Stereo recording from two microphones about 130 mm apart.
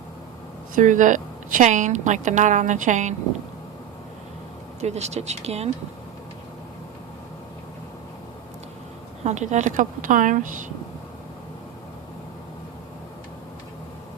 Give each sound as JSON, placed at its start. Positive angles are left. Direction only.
{"t": 0.8, "sound": "a woman's voice", "side_deg": -80}
{"t": 4.8, "sound": "speech", "side_deg": -55}
{"t": 9.2, "sound": "a woman's voice", "side_deg": -65}